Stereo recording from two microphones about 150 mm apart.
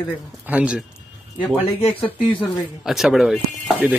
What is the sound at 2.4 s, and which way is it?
Speech, centre (ahead or behind).